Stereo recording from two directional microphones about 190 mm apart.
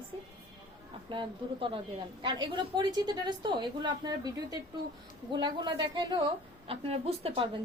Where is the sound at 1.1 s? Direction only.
25° right (ahead or behind).